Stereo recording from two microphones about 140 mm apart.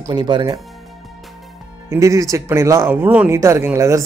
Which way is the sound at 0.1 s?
30° right (ahead or behind).